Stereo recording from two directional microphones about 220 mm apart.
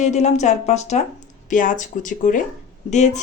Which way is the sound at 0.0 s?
30° left (ahead or behind).